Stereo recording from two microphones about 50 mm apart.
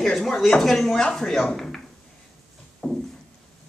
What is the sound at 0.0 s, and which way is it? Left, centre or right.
Speech, centre.